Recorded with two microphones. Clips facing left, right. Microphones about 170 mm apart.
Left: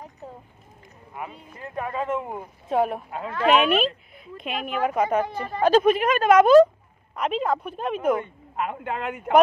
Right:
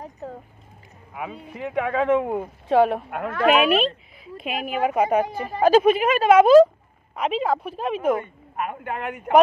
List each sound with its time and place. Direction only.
1.1 s speech: 90° right; by 3.5 s 55° right (ahead or behind)
4.4 s a woman's voice: 5° right (ahead or behind)
8.6 s speech: 20° left (ahead or behind)